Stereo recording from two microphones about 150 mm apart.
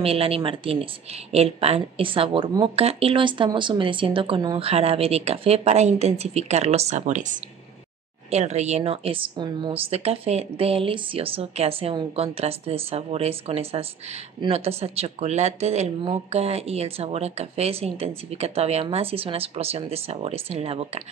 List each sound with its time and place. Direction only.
0.0 s a woman's voice: 40° right (ahead or behind); by 7.3 s 60° right (ahead or behind)
8.3 s a woman's voice: 45° right (ahead or behind)